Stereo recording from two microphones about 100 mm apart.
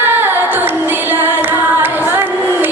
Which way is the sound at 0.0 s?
20° right (ahead or behind).